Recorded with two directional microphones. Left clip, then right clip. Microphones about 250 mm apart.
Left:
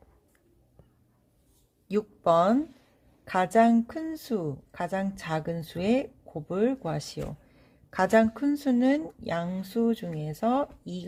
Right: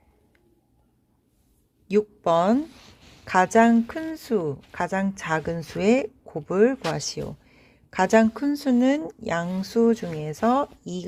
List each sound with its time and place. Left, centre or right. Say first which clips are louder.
1.9 s speech: right 3 dB; right